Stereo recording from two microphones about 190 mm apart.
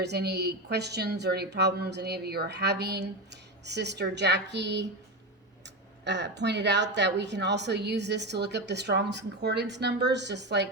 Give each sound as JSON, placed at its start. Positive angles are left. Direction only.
{"t": 0.0, "sound": "a woman's voice", "side_deg": -60}
{"t": 6.1, "sound": "a woman's voice", "side_deg": -65}